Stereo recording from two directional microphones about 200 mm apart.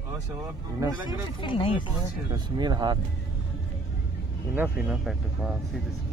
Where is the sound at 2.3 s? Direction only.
20° right (ahead or behind).